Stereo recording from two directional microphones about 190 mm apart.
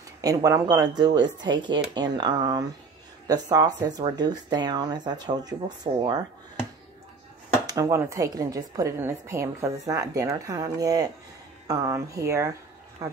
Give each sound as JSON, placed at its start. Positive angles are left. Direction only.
{"t": 0.2, "sound": "speech", "side_deg": -20}
{"t": 5.9, "sound": "speech", "side_deg": -30}
{"t": 7.6, "sound": "speech", "side_deg": -15}